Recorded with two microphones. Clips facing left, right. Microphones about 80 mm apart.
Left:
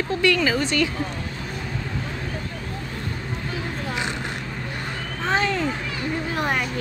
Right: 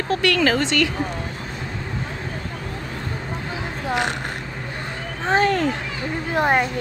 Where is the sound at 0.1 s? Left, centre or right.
Right.